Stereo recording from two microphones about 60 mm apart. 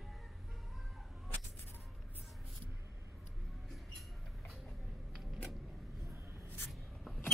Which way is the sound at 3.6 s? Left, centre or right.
Centre.